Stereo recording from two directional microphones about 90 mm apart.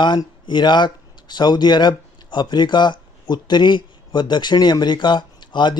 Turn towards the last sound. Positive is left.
turn(degrees=55)  # may be behind; listen again after turning